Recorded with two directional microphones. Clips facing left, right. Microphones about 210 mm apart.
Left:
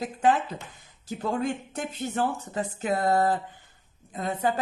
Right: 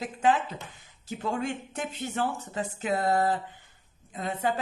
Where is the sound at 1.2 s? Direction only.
40° left (ahead or behind).